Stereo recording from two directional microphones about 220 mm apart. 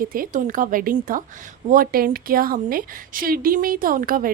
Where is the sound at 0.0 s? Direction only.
40° right (ahead or behind).